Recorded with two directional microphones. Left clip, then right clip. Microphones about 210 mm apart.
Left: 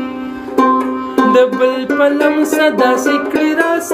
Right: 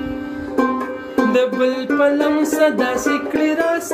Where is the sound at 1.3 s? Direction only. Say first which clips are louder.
Left 6 dB; 15° left (ahead or behind).